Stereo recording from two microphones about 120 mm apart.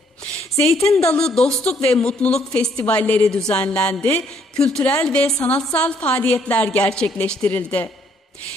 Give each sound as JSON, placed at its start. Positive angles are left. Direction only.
{"t": 0.5, "sound": "speech", "side_deg": 25}
{"t": 1.1, "sound": "a woman's voice", "side_deg": 5}